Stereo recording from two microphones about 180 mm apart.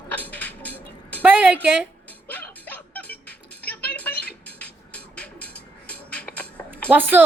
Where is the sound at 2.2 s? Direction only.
10° left (ahead or behind).